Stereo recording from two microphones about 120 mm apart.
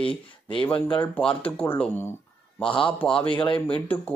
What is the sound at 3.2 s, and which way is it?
Speech, 45° left (ahead or behind).